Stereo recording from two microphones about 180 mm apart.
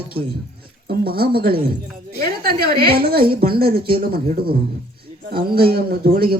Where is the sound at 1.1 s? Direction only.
55° right (ahead or behind).